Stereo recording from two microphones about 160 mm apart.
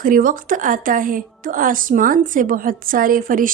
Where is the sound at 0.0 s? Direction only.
60° right (ahead or behind).